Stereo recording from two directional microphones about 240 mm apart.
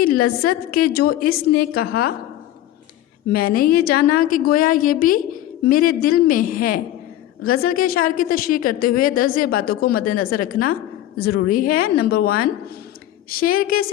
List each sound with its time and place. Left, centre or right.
0.0 s a woman's voice: left
3.2 s a woman's voice: left